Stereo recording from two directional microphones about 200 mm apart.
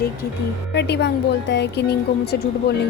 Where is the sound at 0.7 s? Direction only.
60° left (ahead or behind).